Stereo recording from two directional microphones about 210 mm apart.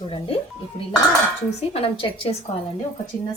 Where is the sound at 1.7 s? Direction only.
25° left (ahead or behind).